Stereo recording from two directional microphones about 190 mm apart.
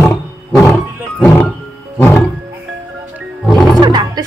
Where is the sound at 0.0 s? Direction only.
15° left (ahead or behind).